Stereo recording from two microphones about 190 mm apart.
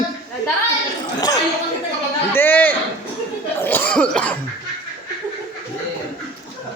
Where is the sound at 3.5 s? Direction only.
10° left (ahead or behind).